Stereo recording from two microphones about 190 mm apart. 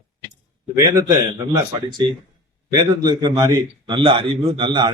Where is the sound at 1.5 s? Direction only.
25° right (ahead or behind).